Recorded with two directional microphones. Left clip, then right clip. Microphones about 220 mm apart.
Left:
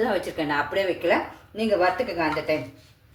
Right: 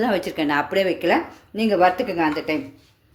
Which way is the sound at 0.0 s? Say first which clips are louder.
Right 3 dB; 45° right (ahead or behind).